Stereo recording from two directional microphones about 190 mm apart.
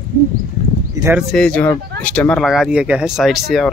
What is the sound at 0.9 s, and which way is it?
Speech, 15° right (ahead or behind).